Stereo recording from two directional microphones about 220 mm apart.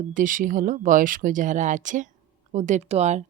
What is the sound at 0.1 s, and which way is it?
Speech, 35° right (ahead or behind).